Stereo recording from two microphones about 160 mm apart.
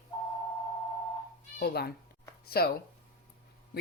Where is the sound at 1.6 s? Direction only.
80° left.